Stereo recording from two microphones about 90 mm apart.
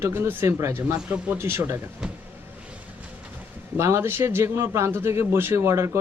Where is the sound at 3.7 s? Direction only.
30° right (ahead or behind).